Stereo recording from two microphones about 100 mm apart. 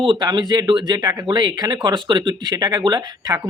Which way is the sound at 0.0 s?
55° right (ahead or behind).